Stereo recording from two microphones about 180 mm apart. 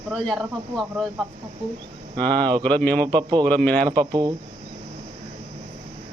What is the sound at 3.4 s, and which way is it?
Speech, 10° left (ahead or behind).